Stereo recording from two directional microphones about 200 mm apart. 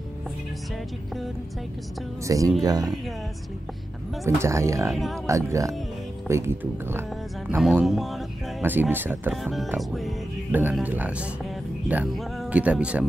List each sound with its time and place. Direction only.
2.2 s speech: 15° right (ahead or behind)
4.2 s speech: 15° right (ahead or behind)
4.9 s speech: centre (ahead or behind)
5.2 s speech: 15° right (ahead or behind)